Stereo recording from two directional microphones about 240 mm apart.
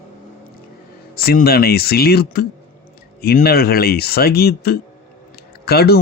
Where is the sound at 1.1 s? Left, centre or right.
Left.